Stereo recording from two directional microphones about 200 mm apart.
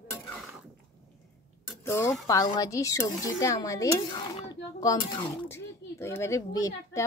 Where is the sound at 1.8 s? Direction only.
15° left (ahead or behind).